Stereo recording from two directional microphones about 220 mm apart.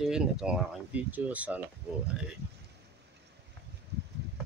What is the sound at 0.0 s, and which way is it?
Speech, centre (ahead or behind).